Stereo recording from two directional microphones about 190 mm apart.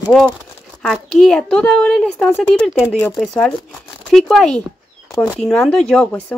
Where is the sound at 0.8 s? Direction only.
Centre (ahead or behind).